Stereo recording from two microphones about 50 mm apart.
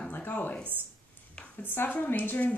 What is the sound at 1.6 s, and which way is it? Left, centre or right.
Speech, left.